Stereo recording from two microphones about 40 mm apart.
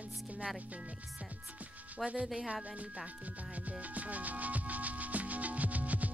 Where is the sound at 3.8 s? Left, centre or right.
Right.